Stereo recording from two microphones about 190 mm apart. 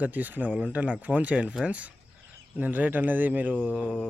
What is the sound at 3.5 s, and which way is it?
Speech, 5° left (ahead or behind).